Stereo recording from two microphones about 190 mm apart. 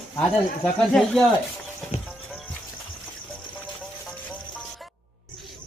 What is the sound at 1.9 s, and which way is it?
Music, 35° left (ahead or behind).